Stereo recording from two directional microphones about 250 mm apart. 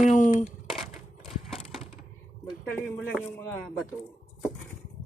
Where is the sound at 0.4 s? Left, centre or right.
Centre.